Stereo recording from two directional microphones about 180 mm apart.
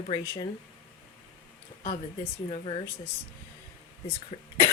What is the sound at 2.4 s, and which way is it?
Speech, 30° left (ahead or behind).